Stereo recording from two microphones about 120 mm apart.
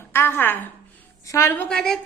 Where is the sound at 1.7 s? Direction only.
5° left (ahead or behind).